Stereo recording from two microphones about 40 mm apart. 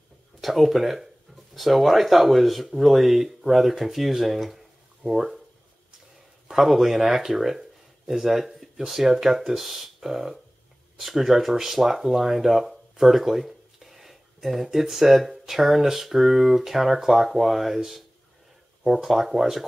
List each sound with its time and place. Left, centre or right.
0.4 s speech: centre
6.5 s speech: centre